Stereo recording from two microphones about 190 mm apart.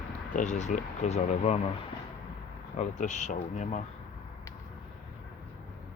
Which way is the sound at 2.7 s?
40° left (ahead or behind).